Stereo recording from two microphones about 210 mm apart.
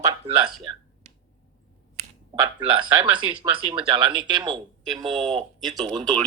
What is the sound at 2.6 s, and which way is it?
Speech, 25° right (ahead or behind).